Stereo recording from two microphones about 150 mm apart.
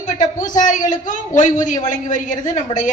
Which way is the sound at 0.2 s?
60° left (ahead or behind).